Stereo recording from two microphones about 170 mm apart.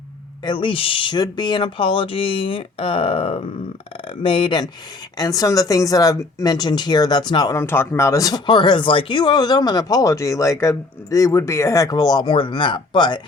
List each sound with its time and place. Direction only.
0.4 s speech: 30° left (ahead or behind)